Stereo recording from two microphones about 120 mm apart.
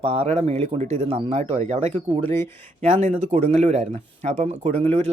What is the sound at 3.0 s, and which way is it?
Speech, 60° right (ahead or behind).